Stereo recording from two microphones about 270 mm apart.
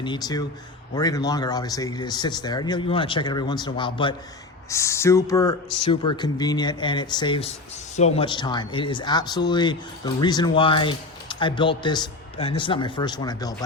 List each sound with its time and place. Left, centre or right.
0.0 s speech: centre